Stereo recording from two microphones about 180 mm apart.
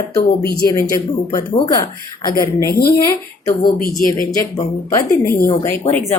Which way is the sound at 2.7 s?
55° left (ahead or behind).